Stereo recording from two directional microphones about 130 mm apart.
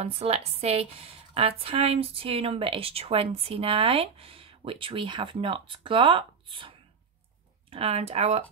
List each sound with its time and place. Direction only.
0.0 s a woman's voice: 50° right (ahead or behind)